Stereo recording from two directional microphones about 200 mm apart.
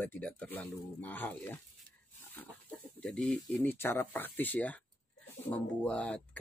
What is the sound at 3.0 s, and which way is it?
Speech, 5° left (ahead or behind).